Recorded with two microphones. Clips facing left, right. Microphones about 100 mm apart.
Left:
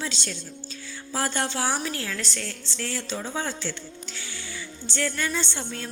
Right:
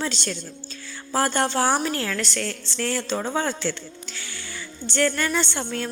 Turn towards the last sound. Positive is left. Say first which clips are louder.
# right 5 dB
turn(degrees=-70)  # may be behind; listen again after turning